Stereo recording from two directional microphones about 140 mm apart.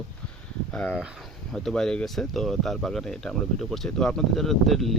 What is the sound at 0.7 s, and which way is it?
Speech, 5° left (ahead or behind).